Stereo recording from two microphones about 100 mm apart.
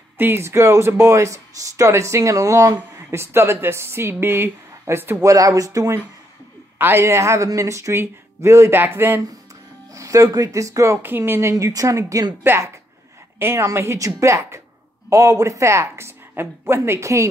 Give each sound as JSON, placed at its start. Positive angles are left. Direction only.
{"t": 0.2, "sound": "speech", "side_deg": -25}
{"t": 5.3, "sound": "speech", "side_deg": -35}
{"t": 9.9, "sound": "speech", "side_deg": -35}
{"t": 11.5, "sound": "speech", "side_deg": -35}